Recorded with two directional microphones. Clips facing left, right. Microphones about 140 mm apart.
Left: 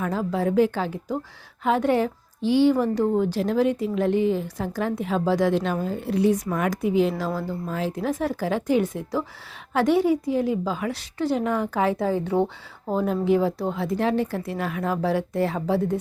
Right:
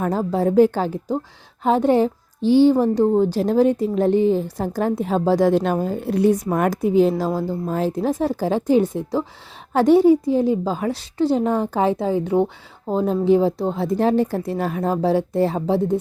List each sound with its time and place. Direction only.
0.0 s a woman's voice: 40° right (ahead or behind)